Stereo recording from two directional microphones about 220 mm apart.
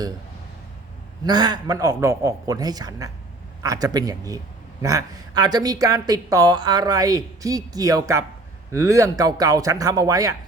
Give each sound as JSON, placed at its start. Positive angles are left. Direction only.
{"t": 1.2, "sound": "a woman's voice", "side_deg": -20}